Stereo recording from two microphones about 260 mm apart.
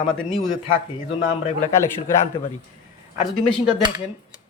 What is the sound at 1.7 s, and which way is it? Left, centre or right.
Speech, centre.